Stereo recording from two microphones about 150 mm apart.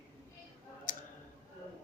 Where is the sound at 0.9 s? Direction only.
60° left (ahead or behind).